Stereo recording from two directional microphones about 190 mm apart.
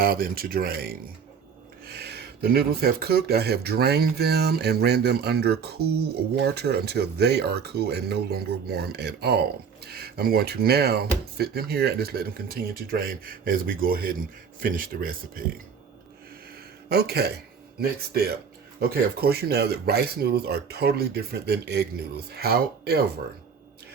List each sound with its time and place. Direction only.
0.0 s speech: 50° right (ahead or behind)
16.9 s speech: 55° right (ahead or behind)